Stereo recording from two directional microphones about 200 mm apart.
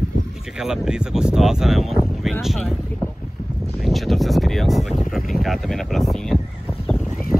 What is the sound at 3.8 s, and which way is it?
Speech, centre (ahead or behind).